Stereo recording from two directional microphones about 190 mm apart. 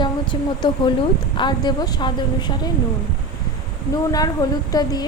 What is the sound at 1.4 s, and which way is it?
Speech, 25° left (ahead or behind).